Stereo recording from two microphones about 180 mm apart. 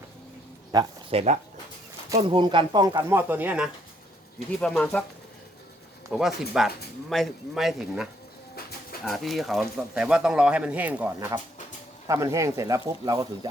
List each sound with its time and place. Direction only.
0.7 s speech: 25° right (ahead or behind)
3.1 s speech: 10° right (ahead or behind)
4.6 s speech: 5° left (ahead or behind)
6.1 s speech: 5° right (ahead or behind)
9.0 s speech: centre (ahead or behind); by 13.5 s 20° right (ahead or behind)